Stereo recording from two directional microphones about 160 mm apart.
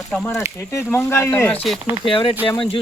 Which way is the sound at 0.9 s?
15° left (ahead or behind).